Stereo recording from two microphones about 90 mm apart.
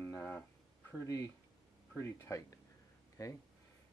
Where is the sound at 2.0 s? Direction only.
30° left (ahead or behind).